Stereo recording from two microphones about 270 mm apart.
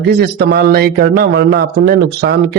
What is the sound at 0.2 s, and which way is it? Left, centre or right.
Speech, right.